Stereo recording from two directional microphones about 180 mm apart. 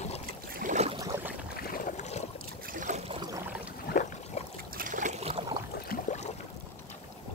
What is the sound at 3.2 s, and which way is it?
Boat, 20° right (ahead or behind).